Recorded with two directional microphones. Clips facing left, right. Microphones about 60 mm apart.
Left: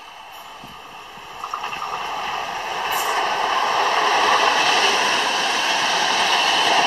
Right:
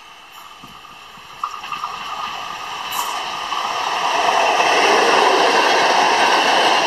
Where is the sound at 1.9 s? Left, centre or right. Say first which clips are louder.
Left 1 dB; left.